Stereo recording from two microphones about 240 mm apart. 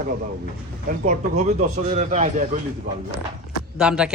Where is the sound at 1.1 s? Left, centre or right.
Right.